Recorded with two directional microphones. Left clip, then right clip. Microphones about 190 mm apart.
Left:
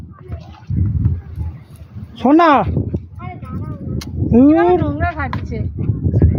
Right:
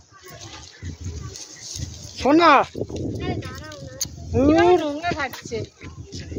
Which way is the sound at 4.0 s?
15° left (ahead or behind).